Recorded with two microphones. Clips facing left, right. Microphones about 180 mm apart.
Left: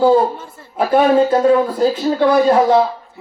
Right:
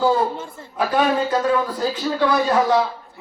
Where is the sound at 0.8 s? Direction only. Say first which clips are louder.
Left 7 dB; 25° left (ahead or behind).